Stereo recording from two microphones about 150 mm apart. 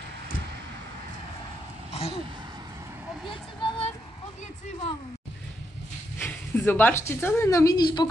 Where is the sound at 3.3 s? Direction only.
35° left (ahead or behind).